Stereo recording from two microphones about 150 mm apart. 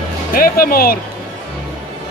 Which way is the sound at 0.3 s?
80° left.